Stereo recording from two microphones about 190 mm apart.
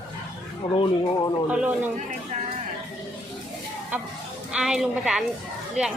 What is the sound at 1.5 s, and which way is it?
Speech, 5° right (ahead or behind).